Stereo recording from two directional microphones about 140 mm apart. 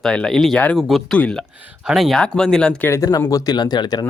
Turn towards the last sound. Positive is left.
turn(degrees=30)  # may be behind; listen again after turning